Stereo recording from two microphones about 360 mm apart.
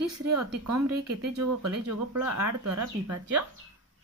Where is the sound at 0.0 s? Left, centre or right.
Right.